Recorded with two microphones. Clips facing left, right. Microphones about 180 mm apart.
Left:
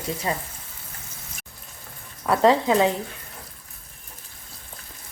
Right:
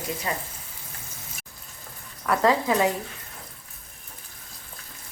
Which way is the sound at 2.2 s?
25° left (ahead or behind).